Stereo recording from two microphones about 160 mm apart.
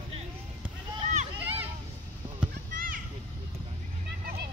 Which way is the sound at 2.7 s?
60° right (ahead or behind).